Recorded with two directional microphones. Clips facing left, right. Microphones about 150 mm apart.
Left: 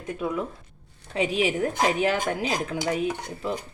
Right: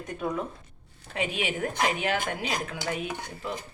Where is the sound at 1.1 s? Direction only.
35° left (ahead or behind).